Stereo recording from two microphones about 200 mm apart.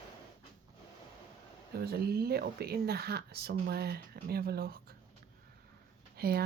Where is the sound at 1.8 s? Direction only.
50° right (ahead or behind).